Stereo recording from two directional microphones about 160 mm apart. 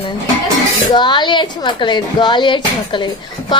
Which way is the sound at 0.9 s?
30° left (ahead or behind).